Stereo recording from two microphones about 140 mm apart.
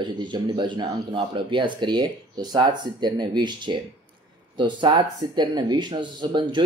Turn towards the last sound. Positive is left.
turn(degrees=-35)  # may be behind; listen again after turning